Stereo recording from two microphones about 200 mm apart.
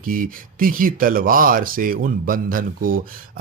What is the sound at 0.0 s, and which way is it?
Speech, 45° right (ahead or behind).